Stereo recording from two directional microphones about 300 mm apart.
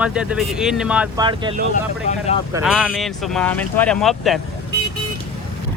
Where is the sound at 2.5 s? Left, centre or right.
Centre.